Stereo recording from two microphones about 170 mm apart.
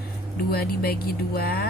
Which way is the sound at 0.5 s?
65° left (ahead or behind).